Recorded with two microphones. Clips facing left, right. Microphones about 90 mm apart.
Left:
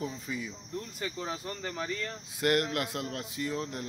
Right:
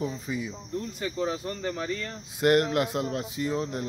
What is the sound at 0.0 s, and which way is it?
Speech, 20° right (ahead or behind).